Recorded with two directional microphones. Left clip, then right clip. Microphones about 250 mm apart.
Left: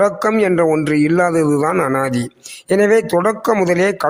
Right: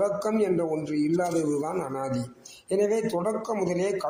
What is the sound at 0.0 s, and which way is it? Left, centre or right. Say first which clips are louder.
A man's voice: left 11 dB; left.